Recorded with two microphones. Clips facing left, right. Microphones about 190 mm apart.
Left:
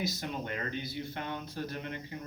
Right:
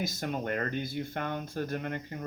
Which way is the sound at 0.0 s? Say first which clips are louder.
Right 3 dB; 50° right (ahead or behind).